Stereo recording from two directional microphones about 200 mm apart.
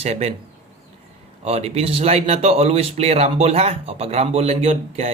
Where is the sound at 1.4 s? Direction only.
30° right (ahead or behind).